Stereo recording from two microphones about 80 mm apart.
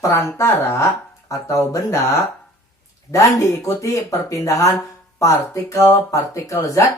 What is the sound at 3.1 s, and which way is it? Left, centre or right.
Speech, left.